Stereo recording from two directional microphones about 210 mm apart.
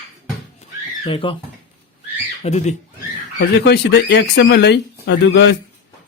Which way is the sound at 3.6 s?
55° left (ahead or behind).